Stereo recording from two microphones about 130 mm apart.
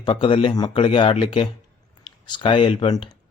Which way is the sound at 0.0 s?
40° left (ahead or behind).